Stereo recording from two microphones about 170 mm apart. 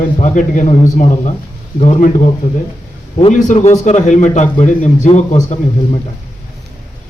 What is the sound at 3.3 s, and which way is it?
A man's voice, 45° left (ahead or behind).